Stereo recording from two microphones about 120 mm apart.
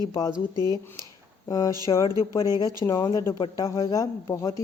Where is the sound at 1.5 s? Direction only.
30° left (ahead or behind).